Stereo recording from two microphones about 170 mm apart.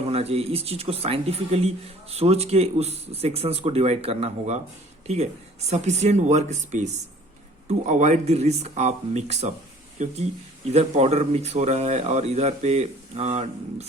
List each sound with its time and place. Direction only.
0.0 s speech: 35° right (ahead or behind)